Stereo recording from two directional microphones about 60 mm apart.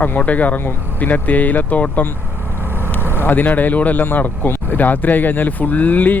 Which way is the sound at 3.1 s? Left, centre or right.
Left.